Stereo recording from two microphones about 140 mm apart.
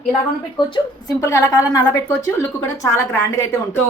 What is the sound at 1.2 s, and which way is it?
A woman's voice, 20° left (ahead or behind).